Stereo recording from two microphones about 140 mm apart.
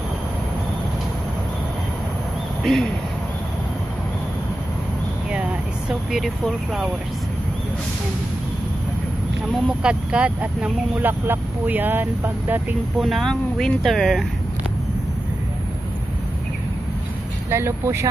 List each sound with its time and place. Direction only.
2.6 s speech: centre (ahead or behind)
5.9 s speech: centre (ahead or behind)
9.8 s speech: 10° right (ahead or behind)
13.0 s speech: centre (ahead or behind)
17.5 s speech: 20° right (ahead or behind)